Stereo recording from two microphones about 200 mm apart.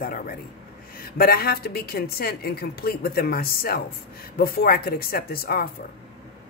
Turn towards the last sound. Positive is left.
turn(degrees=50)  # may be behind; listen again after turning